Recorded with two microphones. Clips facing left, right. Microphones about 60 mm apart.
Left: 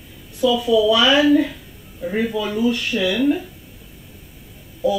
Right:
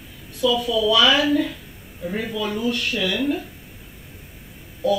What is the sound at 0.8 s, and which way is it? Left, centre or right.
Speech, left.